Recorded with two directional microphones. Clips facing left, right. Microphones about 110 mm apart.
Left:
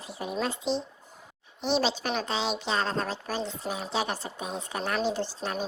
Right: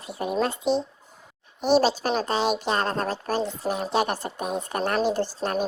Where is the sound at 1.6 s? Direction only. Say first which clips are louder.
Right 7 dB; 45° right (ahead or behind).